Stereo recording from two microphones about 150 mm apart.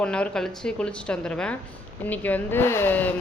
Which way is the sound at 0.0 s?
5° left (ahead or behind).